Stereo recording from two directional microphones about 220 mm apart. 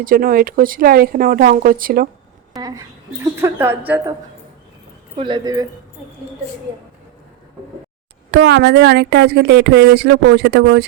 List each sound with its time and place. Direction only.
0.0 s speech: 40° right (ahead or behind)
2.6 s a woman's voice: 15° right (ahead or behind)
5.1 s speech: 20° right (ahead or behind)
8.3 s speech: 50° right (ahead or behind)